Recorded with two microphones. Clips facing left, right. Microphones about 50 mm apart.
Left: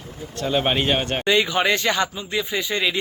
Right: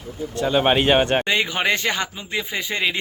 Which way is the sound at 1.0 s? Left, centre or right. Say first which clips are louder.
Right 1 dB; right.